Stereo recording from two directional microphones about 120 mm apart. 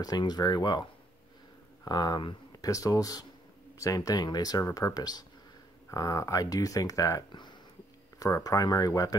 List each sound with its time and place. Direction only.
0.0 s speech: 35° left (ahead or behind)
1.9 s speech: 35° left (ahead or behind)